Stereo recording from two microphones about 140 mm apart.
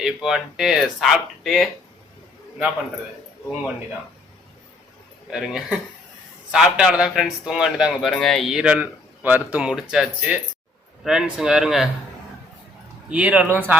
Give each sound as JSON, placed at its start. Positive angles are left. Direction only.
{"t": 0.0, "sound": "speech", "side_deg": 0}
{"t": 5.3, "sound": "speech", "side_deg": -5}
{"t": 13.1, "sound": "speech", "side_deg": -10}